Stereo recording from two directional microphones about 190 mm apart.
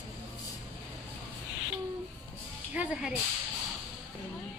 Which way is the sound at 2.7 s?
5° right (ahead or behind).